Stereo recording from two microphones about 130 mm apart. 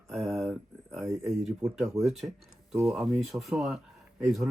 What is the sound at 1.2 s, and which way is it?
Speech, centre (ahead or behind).